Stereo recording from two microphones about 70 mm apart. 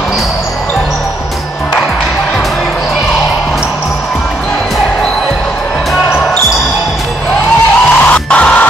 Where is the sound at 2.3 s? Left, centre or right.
Centre.